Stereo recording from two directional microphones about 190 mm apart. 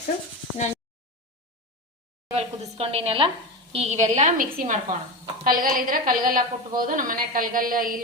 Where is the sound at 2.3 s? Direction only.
30° right (ahead or behind).